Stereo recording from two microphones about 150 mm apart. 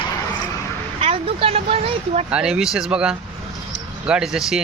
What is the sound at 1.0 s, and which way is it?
Speech, 40° right (ahead or behind).